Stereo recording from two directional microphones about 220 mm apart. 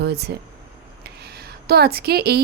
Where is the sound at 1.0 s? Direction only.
45° right (ahead or behind).